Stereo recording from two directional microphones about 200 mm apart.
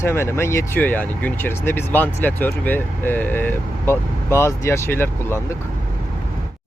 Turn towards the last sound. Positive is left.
turn(degrees=10)  # may be behind; listen again after turning